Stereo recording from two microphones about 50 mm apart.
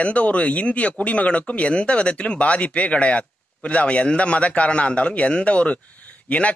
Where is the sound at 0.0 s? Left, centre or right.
Left.